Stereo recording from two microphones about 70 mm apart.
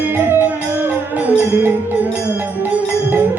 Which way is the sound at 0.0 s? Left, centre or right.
Right.